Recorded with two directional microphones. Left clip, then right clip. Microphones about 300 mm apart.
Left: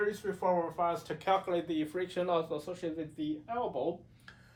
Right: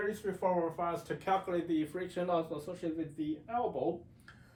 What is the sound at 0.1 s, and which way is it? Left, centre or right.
Speech, centre.